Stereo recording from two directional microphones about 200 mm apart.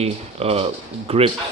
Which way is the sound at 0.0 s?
30° right (ahead or behind).